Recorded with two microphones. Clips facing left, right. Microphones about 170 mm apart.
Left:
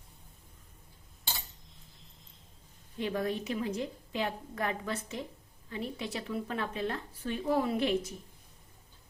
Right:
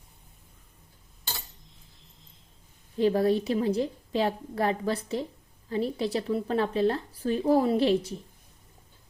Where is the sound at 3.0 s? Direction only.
35° right (ahead or behind).